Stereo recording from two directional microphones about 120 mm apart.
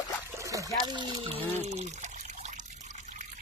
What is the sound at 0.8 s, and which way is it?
Speech, 40° right (ahead or behind).